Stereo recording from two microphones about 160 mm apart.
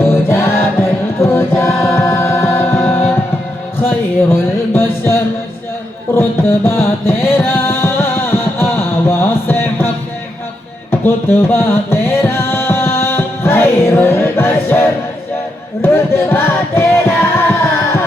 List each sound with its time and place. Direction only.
0.0 s music: 15° left (ahead or behind)
3.8 s a sound: 15° left (ahead or behind)
6.7 s music: 15° left (ahead or behind)
11.0 s music: 15° left (ahead or behind)